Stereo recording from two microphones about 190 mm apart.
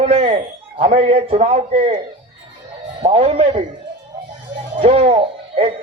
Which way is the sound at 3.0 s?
30° right (ahead or behind).